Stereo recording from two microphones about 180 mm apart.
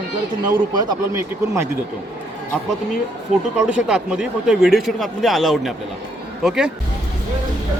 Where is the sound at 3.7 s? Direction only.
5° right (ahead or behind).